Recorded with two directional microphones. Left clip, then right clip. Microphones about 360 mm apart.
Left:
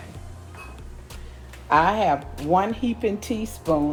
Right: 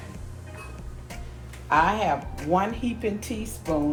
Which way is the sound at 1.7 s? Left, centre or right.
Left.